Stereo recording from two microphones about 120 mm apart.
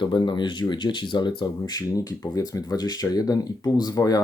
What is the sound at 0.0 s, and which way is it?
Speech, 40° left (ahead or behind).